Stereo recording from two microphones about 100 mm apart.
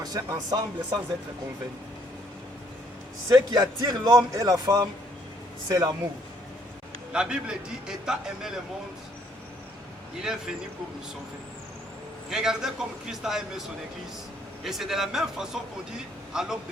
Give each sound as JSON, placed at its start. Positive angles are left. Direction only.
{"t": 0.0, "sound": "speech", "side_deg": -40}
{"t": 3.5, "sound": "speech", "side_deg": -40}
{"t": 7.1, "sound": "a man's voice", "side_deg": -10}
{"t": 12.3, "sound": "a man's voice", "side_deg": -5}
{"t": 14.6, "sound": "a man's voice", "side_deg": 0}